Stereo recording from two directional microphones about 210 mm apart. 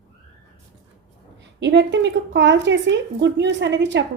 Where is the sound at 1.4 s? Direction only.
55° right (ahead or behind).